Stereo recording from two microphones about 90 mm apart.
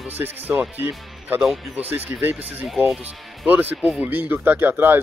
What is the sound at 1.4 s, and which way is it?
Speech, centre (ahead or behind).